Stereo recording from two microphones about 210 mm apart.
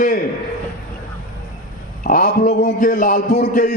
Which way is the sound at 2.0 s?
40° left (ahead or behind).